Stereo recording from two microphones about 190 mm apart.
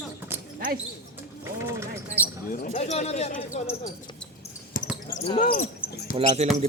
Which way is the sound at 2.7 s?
35° left (ahead or behind).